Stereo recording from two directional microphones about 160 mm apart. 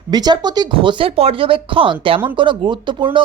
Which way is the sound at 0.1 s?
25° right (ahead or behind).